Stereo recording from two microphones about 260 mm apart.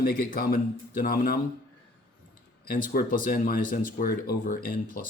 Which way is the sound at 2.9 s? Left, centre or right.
Left.